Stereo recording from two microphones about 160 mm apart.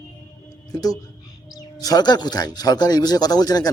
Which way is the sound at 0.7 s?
25° left (ahead or behind).